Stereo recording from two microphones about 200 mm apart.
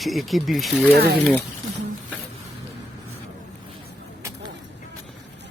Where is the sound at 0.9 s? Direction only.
55° right (ahead or behind).